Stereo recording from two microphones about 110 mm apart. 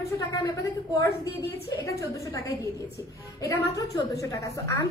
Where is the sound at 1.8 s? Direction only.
30° left (ahead or behind).